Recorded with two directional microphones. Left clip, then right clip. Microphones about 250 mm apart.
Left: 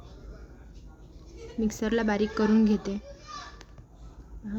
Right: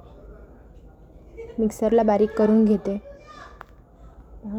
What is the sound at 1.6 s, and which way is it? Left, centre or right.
Speech, centre.